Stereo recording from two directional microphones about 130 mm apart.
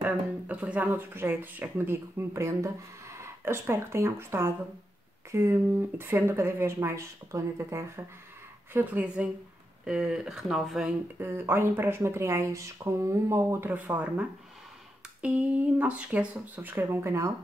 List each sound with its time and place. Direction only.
0.0 s speech: 10° right (ahead or behind)
8.7 s speech: 10° right (ahead or behind)
11.1 s speech: 20° right (ahead or behind)
15.2 s speech: 10° right (ahead or behind)